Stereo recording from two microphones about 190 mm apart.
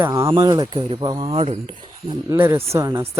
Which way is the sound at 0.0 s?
15° right (ahead or behind).